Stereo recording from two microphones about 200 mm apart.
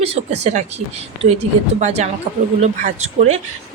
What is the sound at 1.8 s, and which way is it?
Speech, 35° right (ahead or behind).